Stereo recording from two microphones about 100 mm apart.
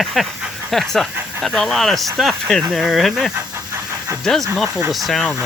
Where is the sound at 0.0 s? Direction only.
Centre (ahead or behind).